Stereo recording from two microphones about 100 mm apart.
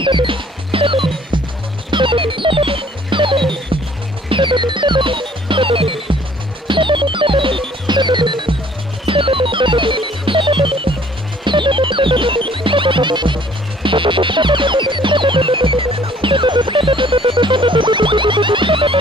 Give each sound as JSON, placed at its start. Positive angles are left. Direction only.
{"t": 0.0, "sound": "music", "side_deg": -55}